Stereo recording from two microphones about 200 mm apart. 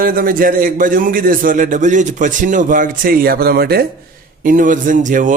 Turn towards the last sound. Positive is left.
turn(degrees=-40)  # may be behind; listen again after turning